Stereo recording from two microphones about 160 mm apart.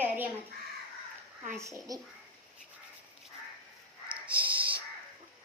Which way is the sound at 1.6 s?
20° right (ahead or behind).